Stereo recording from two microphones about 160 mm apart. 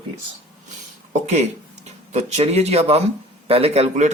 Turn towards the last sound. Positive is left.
turn(degrees=-45)  # may be behind; listen again after turning